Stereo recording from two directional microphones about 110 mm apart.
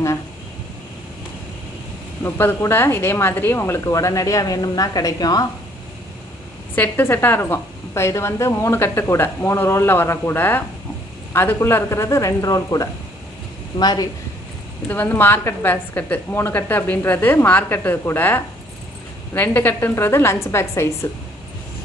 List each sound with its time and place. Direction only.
2.2 s a woman's voice: 20° left (ahead or behind)
6.7 s a woman's voice: 20° left (ahead or behind); by 14.0 s 40° left (ahead or behind)
14.9 s a woman's voice: 15° left (ahead or behind)